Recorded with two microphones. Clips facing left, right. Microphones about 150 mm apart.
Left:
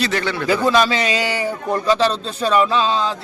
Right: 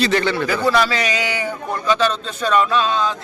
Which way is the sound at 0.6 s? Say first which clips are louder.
Left 1 dB; 20° left (ahead or behind).